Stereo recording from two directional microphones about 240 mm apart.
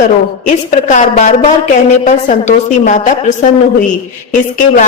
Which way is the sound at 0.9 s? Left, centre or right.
Left.